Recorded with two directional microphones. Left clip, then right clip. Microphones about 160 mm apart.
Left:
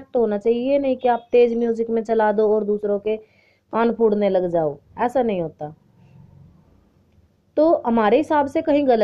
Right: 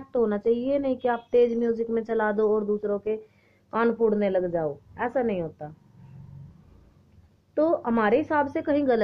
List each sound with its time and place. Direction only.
0.1 s a woman's voice: 25° left (ahead or behind); by 5.8 s 50° left (ahead or behind)
7.5 s a woman's voice: 45° left (ahead or behind)